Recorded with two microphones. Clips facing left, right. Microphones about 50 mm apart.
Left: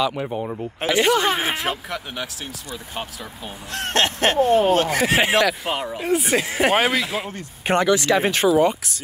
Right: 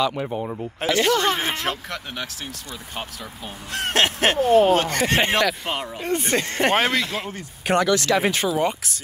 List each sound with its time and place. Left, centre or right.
0.0 s speech: centre
0.7 s speech: centre
3.7 s speech: centre
7.6 s speech: left
8.5 s speech: centre